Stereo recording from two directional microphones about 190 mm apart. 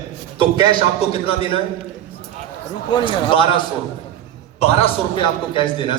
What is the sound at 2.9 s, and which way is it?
Speech, 25° left (ahead or behind).